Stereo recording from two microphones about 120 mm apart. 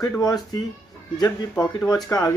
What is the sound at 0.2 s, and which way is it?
Speech, 35° left (ahead or behind).